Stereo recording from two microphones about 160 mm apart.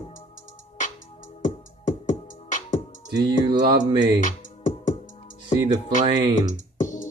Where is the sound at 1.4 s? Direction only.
50° left (ahead or behind).